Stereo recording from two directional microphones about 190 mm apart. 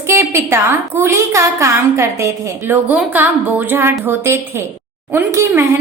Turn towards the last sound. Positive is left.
turn(degrees=-15)  # may be behind; listen again after turning